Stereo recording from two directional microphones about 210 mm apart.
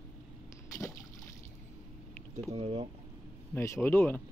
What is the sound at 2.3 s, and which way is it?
Speech, 30° right (ahead or behind).